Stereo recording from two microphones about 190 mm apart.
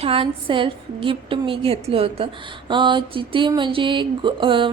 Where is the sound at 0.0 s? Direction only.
30° right (ahead or behind).